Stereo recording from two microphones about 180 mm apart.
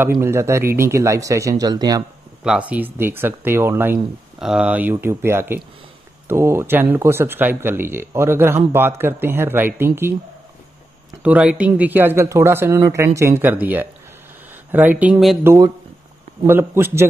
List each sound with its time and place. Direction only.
0.2 s speech: 15° right (ahead or behind)
2.4 s speech: 5° right (ahead or behind)
11.2 s speech: 5° right (ahead or behind)
15.4 s speech: 15° right (ahead or behind)